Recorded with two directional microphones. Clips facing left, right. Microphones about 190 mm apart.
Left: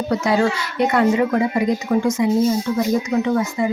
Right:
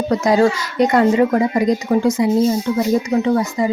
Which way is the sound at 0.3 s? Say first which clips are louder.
Right 5 dB; 40° right (ahead or behind).